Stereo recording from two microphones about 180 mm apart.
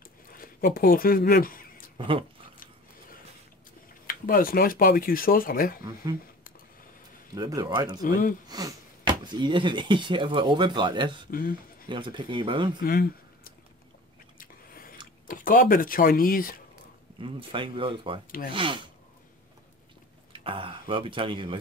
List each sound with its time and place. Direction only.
0.3 s speech: 55° left (ahead or behind)
2.0 s speech: 30° right (ahead or behind)
4.1 s speech: 50° left (ahead or behind)
7.3 s speech: 20° right (ahead or behind)
8.0 s speech: 50° left (ahead or behind)
8.5 s speech: 20° right (ahead or behind)
11.2 s speech: 50° left (ahead or behind)
11.9 s speech: 25° right (ahead or behind)
12.8 s speech: 55° left (ahead or behind)
14.4 s biting: 55° left (ahead or behind)
15.2 s speech: 50° left (ahead or behind)
17.2 s speech: 30° right (ahead or behind)
20.3 s speech: 30° right (ahead or behind)